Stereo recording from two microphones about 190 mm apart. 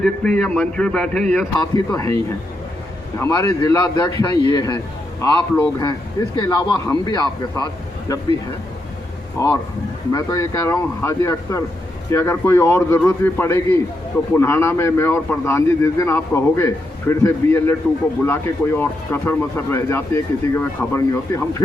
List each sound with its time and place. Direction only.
0.0 s speech: 5° left (ahead or behind)
1.5 s speech: 20° left (ahead or behind)
3.2 s speech: 15° left (ahead or behind)
5.2 s speech: 10° left (ahead or behind)
5.8 s speech: 20° left (ahead or behind)
9.4 s speech: 15° left (ahead or behind)